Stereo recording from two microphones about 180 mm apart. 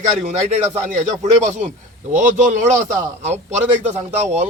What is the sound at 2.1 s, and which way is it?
Speech, 45° right (ahead or behind).